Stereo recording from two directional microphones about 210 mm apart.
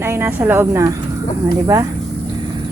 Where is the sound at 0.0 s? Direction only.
10° right (ahead or behind).